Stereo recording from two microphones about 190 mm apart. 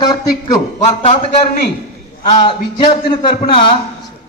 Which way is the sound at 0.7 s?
35° left (ahead or behind).